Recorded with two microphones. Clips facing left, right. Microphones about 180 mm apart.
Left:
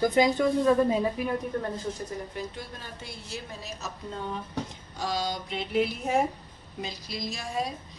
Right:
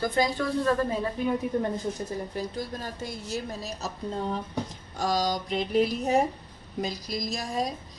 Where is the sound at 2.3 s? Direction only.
40° right (ahead or behind).